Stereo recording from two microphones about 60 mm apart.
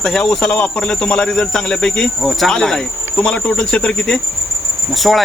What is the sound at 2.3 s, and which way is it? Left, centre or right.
Speech, centre.